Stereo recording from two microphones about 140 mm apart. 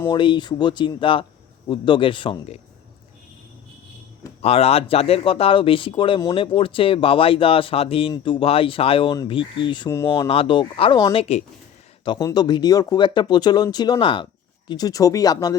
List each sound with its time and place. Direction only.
0.1 s speech: 35° left (ahead or behind)
4.4 s speech: 45° left (ahead or behind)
12.0 s speech: 30° left (ahead or behind)